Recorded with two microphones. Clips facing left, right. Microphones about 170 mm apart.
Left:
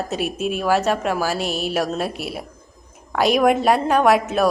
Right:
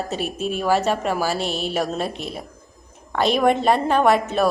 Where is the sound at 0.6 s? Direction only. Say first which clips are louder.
Even; 5° left (ahead or behind).